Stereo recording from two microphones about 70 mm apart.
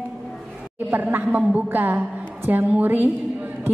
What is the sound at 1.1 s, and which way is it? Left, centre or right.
A woman's voice, right.